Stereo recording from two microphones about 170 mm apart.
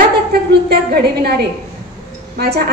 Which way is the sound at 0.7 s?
70° right (ahead or behind).